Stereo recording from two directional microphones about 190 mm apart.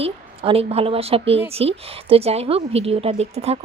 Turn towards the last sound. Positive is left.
turn(degrees=-35)  # may be behind; listen again after turning